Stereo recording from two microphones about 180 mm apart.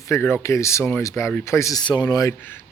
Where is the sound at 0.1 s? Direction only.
15° left (ahead or behind).